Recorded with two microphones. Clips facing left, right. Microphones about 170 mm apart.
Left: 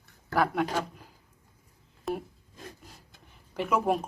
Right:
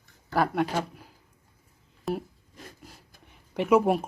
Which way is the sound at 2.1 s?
Centre (ahead or behind).